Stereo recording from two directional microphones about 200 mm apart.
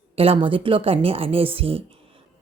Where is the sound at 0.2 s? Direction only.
25° right (ahead or behind).